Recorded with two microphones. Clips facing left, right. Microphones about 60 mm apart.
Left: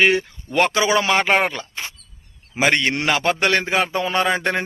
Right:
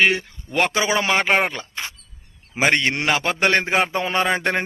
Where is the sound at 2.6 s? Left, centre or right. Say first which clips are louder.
Even; centre.